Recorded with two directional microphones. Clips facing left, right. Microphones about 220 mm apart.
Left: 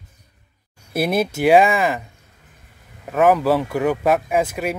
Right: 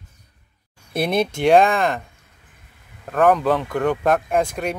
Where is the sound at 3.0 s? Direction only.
5° left (ahead or behind).